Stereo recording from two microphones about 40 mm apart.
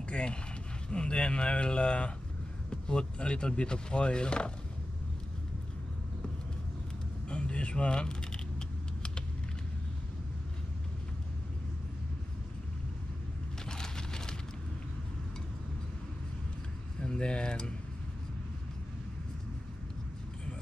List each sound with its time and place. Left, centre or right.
0.1 s speech: left
7.2 s typing: left
13.7 s a sound: centre
17.0 s speech: left